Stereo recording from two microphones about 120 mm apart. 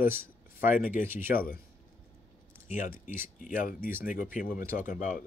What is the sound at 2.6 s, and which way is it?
Speech, 90° left.